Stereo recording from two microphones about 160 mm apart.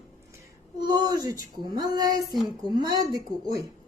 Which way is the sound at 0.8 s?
25° right (ahead or behind).